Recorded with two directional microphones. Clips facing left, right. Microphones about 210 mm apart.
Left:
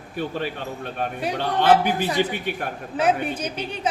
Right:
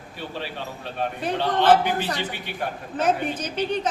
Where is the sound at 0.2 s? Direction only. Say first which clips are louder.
Left 6 dB; 50° left (ahead or behind).